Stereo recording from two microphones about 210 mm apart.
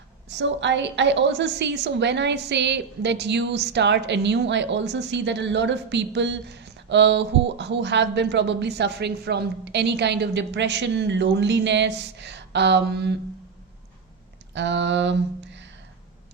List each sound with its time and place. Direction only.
0.3 s a woman's voice: 55° right (ahead or behind)
14.5 s a woman's voice: 60° right (ahead or behind)